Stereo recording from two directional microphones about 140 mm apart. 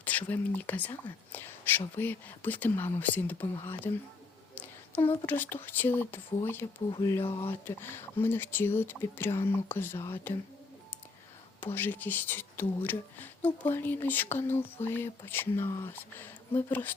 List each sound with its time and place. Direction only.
0.0 s speech: 10° left (ahead or behind)
1.3 s a sound: 15° left (ahead or behind)
2.0 s speech: 15° left (ahead or behind)
4.6 s a sound: 15° left (ahead or behind)
5.2 s speech: 15° left (ahead or behind)
11.6 s speech: 15° left (ahead or behind)